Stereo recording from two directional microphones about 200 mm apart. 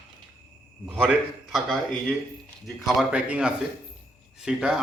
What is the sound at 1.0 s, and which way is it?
Speech, 5° right (ahead or behind).